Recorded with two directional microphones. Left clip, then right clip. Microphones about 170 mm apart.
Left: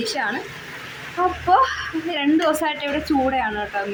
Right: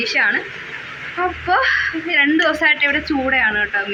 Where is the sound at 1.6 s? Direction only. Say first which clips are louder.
Right 6 dB; 30° left (ahead or behind).